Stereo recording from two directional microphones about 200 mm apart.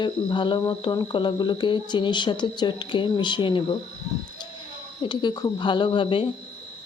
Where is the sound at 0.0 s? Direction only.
25° left (ahead or behind).